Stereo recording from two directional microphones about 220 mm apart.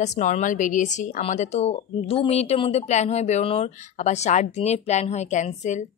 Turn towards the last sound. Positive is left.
turn(degrees=35)  # may be behind; listen again after turning